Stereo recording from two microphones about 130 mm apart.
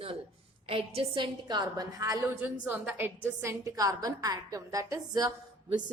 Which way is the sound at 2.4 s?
15° right (ahead or behind).